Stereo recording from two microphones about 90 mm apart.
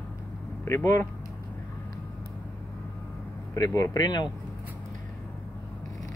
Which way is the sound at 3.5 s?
45° left (ahead or behind).